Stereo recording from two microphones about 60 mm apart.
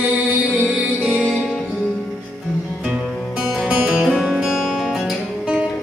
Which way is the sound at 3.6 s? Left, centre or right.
Centre.